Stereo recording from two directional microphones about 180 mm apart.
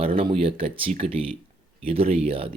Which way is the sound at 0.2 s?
30° right (ahead or behind).